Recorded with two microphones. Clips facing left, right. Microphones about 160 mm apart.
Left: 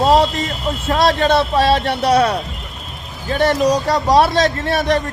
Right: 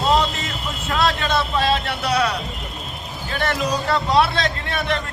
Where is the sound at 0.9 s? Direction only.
35° left (ahead or behind).